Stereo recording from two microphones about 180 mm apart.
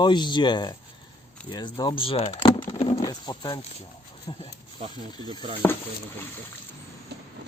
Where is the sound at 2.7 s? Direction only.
35° left (ahead or behind).